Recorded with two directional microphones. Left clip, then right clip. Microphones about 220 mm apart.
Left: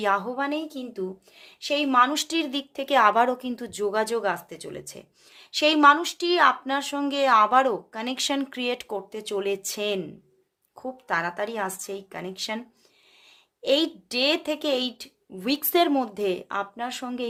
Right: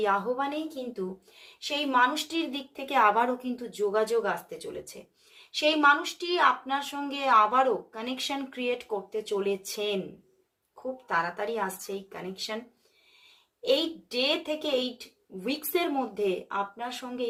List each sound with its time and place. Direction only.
0.0 s speech: 50° left (ahead or behind)
1.6 s speech: 55° left (ahead or behind)
11.1 s speech: 50° left (ahead or behind)
13.6 s speech: 50° left (ahead or behind)